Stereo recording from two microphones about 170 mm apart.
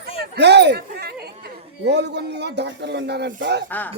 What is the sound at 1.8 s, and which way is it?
Speech, 90° right.